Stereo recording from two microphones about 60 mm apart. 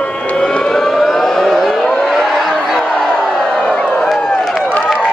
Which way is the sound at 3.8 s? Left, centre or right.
Centre.